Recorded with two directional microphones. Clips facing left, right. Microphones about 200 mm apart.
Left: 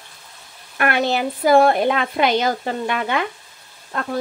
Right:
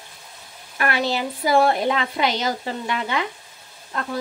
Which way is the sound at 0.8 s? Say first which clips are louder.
Left 3 dB; 55° left (ahead or behind).